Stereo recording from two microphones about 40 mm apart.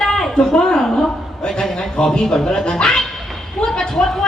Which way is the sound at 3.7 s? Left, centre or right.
Centre.